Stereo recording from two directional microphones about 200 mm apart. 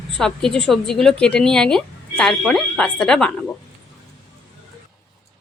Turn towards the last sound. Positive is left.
turn(degrees=5)  # may be behind; listen again after turning